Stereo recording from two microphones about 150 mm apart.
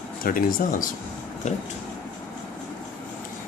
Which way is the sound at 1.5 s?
50° left (ahead or behind).